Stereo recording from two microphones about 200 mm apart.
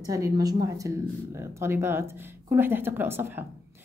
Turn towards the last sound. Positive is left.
turn(degrees=-10)  # may be behind; listen again after turning